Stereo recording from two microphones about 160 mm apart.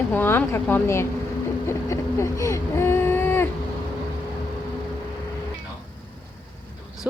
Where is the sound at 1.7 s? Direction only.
20° left (ahead or behind).